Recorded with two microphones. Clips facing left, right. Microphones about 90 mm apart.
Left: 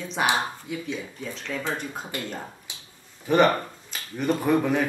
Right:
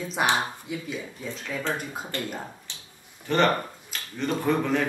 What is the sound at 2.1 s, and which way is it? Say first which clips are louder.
Speech: right 2 dB; 10° left (ahead or behind).